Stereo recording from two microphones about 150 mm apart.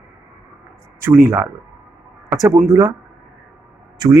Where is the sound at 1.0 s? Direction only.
15° right (ahead or behind).